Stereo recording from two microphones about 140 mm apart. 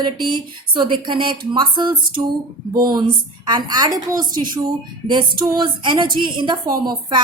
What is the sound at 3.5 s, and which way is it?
Speech, 30° right (ahead or behind).